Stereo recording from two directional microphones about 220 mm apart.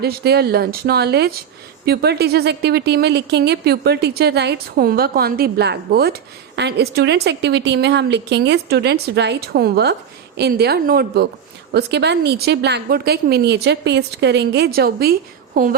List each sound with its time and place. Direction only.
0.0 s speech: 45° right (ahead or behind)